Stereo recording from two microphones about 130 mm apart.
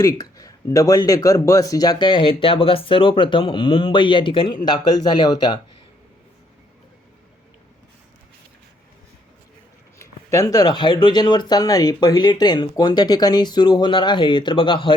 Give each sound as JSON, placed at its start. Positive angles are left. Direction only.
{"t": 0.0, "sound": "speech", "side_deg": 25}
{"t": 10.0, "sound": "speech", "side_deg": 25}